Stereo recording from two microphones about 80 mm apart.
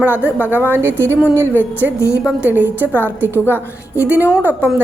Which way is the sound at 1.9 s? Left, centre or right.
Left.